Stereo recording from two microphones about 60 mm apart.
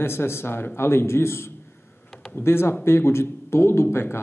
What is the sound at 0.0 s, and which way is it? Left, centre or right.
Speech, left.